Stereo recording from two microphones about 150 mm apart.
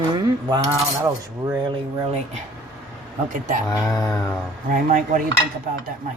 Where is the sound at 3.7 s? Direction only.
25° left (ahead or behind).